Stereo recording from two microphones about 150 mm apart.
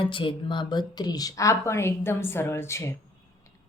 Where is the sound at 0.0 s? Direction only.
35° left (ahead or behind); by 3.0 s 15° left (ahead or behind).